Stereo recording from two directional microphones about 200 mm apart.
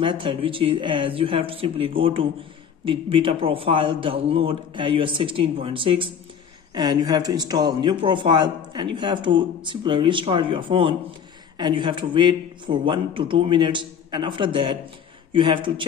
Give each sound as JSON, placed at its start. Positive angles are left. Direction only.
{"t": 0.0, "sound": "a man's voice", "side_deg": -25}